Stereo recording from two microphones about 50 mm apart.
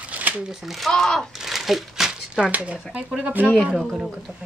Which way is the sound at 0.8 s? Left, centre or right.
Centre.